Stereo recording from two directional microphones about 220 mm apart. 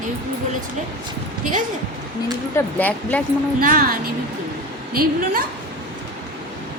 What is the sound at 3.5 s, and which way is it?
A woman's voice, 40° right (ahead or behind).